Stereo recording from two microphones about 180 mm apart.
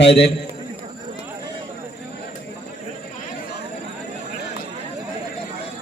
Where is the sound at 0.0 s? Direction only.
70° left (ahead or behind).